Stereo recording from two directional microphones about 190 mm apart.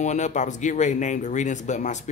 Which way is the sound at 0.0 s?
40° left (ahead or behind).